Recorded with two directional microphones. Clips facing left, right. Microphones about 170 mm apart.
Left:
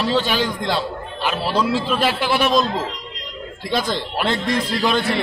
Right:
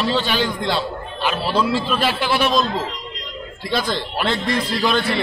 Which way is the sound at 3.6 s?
15° left (ahead or behind).